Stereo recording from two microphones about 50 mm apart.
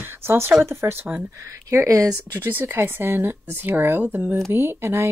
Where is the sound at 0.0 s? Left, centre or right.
Right.